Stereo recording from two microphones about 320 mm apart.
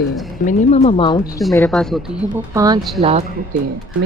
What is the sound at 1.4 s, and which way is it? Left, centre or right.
Speech, centre.